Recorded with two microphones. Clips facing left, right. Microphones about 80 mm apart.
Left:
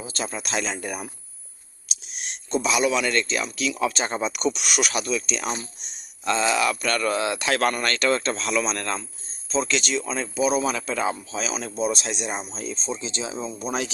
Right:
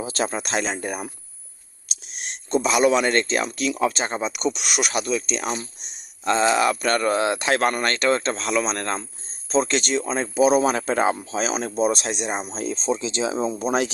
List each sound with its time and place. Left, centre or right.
0.0 s speech: right
0.3 s a man's voice: right
2.6 s a man's voice: right
3.8 s speech: right
9.6 s a man's voice: right
10.4 s speech: right
12.1 s a man's voice: right
12.5 s speech: right